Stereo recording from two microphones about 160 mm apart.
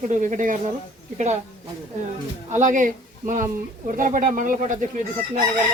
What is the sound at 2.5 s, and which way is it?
Speech, 50° right (ahead or behind).